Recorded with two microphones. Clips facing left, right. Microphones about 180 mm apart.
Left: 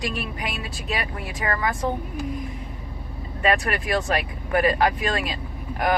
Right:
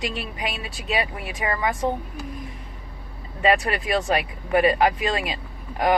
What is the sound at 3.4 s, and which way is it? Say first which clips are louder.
Speech: right 2 dB; 20° right (ahead or behind).